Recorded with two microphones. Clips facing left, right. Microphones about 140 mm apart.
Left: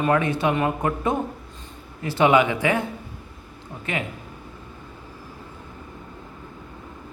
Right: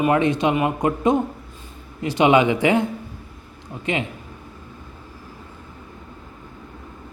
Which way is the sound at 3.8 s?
20° right (ahead or behind).